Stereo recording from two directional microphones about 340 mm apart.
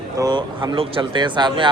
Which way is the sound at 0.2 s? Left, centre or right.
Centre.